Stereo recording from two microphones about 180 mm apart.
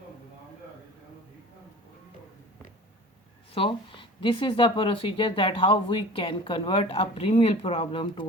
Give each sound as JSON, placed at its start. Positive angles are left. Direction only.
{"t": 3.5, "sound": "speech", "side_deg": 30}